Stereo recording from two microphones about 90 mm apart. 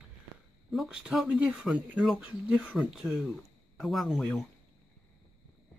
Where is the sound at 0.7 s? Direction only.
5° right (ahead or behind).